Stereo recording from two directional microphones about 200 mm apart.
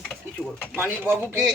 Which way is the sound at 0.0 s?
5° left (ahead or behind).